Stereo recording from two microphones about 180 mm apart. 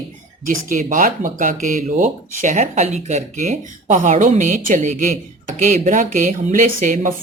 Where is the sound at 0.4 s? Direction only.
45° right (ahead or behind).